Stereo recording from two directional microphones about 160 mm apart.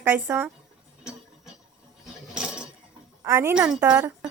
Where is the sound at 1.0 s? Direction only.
5° right (ahead or behind).